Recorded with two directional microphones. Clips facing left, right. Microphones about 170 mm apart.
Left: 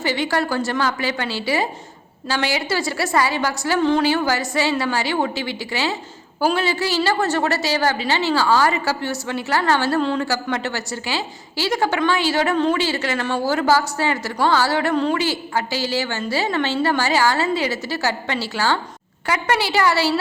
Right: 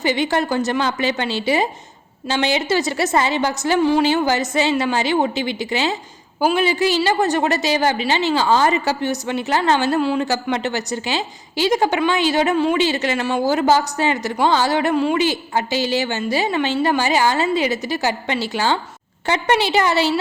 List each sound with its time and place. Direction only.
0.0 s a woman's voice: 20° right (ahead or behind)